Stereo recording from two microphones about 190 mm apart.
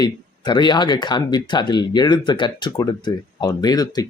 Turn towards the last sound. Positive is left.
turn(degrees=20)  # may be behind; listen again after turning